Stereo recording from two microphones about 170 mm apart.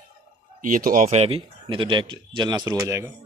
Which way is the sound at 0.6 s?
55° right (ahead or behind).